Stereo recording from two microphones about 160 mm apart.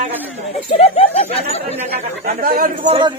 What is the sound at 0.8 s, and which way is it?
Speech, 40° left (ahead or behind).